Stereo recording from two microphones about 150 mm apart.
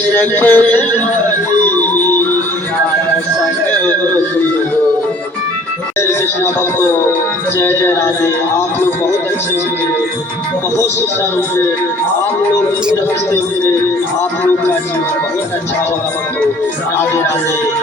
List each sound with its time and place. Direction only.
0.2 s speech: 10° left (ahead or behind)
1.6 s music: 10° left (ahead or behind)
7.6 s speech: 15° left (ahead or behind)